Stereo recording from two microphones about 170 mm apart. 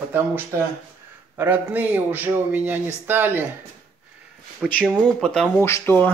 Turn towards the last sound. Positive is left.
turn(degrees=15)  # may be behind; listen again after turning